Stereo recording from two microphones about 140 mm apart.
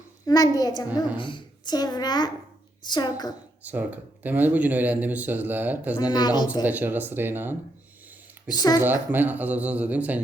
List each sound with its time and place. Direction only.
0.3 s a child's voice: 25° left (ahead or behind)
3.6 s speech: 10° right (ahead or behind)
6.1 s a child's voice: 30° left (ahead or behind)
6.7 s speech: 10° right (ahead or behind)
8.4 s a child's voice: 30° left (ahead or behind)
8.8 s speech: 15° right (ahead or behind)